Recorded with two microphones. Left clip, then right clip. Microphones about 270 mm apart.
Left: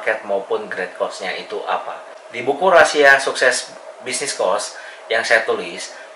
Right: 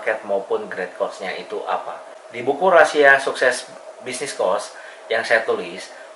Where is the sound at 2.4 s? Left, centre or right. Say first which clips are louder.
Left 1 dB; right.